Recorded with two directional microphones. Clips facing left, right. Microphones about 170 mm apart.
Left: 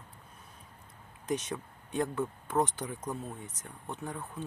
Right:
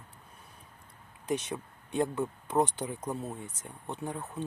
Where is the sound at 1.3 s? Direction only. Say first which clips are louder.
Right 1 dB; 25° right (ahead or behind); by 3.3 s 5° right (ahead or behind).